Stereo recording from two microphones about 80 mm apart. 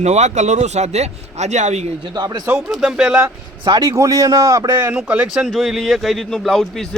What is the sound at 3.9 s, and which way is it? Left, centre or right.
Speech, right.